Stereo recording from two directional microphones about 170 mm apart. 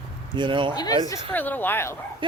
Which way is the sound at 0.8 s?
20° left (ahead or behind).